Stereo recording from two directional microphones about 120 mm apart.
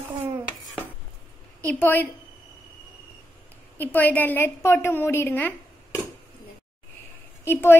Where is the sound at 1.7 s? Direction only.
15° left (ahead or behind).